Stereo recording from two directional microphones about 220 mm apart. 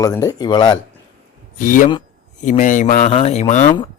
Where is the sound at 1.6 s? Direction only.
35° left (ahead or behind).